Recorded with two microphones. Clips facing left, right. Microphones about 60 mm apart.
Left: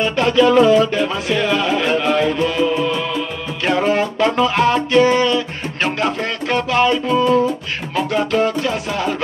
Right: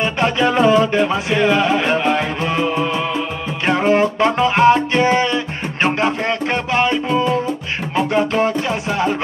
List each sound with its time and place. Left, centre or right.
0.0 s music: right